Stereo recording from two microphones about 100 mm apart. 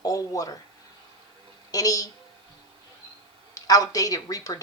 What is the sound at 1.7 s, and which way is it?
Speech, 35° left (ahead or behind).